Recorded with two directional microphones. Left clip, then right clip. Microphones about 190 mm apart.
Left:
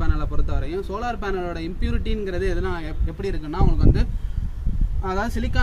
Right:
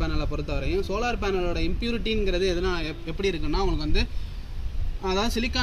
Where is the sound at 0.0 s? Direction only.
10° left (ahead or behind).